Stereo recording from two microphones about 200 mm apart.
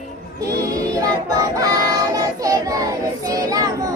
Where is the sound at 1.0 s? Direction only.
20° right (ahead or behind).